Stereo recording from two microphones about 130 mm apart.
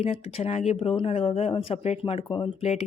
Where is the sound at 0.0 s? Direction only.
50° left (ahead or behind).